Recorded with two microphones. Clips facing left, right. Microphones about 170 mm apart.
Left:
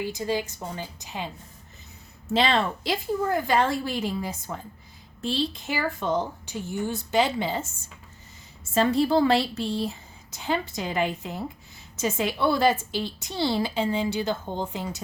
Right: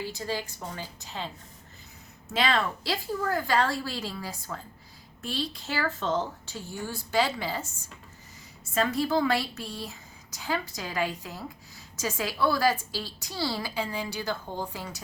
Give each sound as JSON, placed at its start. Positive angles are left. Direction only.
{"t": 0.0, "sound": "a woman's voice", "side_deg": 15}
{"t": 2.3, "sound": "a woman's voice", "side_deg": 25}
{"t": 5.6, "sound": "a woman's voice", "side_deg": 15}